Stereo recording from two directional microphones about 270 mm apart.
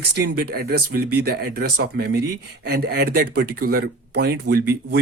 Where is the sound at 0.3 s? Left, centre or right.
Right.